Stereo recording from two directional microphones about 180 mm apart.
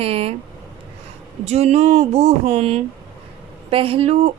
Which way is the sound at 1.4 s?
35° right (ahead or behind).